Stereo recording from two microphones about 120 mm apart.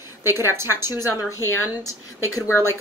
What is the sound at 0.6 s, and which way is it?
Speech, 20° right (ahead or behind).